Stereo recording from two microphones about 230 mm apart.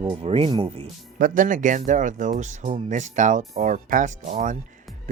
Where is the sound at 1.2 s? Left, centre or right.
Right.